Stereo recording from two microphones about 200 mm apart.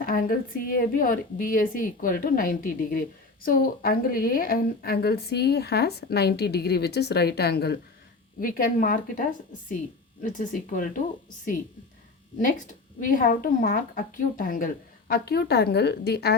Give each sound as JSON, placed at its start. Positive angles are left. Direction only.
{"t": 0.0, "sound": "a woman's voice", "side_deg": 45}
{"t": 10.2, "sound": "a woman's voice", "side_deg": 40}
{"t": 12.4, "sound": "a woman's voice", "side_deg": 40}